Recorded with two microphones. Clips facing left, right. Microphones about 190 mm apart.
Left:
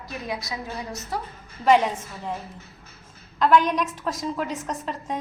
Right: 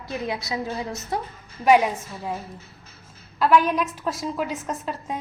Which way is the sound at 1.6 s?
10° right (ahead or behind).